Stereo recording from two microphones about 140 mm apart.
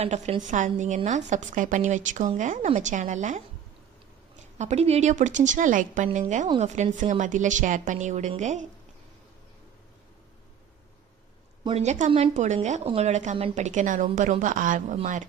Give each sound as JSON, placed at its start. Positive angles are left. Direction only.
{"t": 0.0, "sound": "a woman's voice", "side_deg": -50}
{"t": 11.7, "sound": "a woman's voice", "side_deg": -55}